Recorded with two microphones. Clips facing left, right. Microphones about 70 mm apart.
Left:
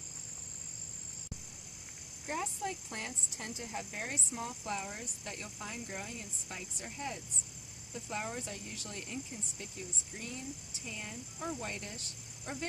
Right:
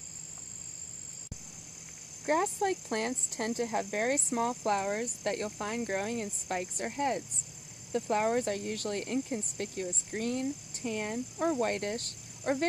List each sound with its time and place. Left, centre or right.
2.2 s speech: right